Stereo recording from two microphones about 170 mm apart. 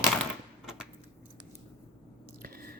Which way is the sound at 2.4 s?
60° right (ahead or behind).